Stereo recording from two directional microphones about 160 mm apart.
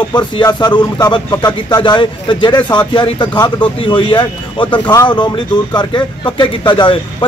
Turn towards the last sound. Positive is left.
turn(degrees=30)  # may be behind; listen again after turning